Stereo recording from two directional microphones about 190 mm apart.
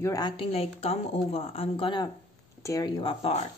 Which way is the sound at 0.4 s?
30° left (ahead or behind).